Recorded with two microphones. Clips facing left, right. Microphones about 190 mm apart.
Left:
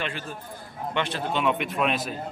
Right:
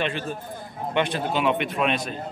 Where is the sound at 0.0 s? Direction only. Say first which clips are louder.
Right 5 dB; 25° right (ahead or behind).